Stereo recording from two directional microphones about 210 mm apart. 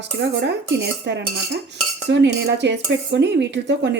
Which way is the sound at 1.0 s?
55° right (ahead or behind).